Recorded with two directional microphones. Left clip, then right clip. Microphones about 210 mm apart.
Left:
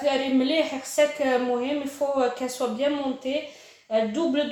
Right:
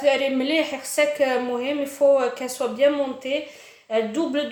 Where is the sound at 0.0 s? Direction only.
35° right (ahead or behind).